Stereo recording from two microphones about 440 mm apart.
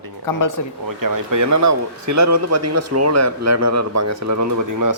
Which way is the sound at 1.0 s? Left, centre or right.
Right.